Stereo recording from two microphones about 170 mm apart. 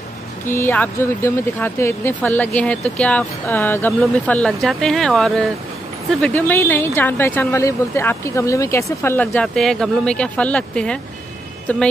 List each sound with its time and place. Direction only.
0.5 s speech: 10° left (ahead or behind)